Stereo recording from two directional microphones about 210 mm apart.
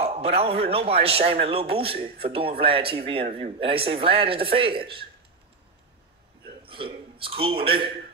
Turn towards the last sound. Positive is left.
turn(degrees=-25)  # may be behind; listen again after turning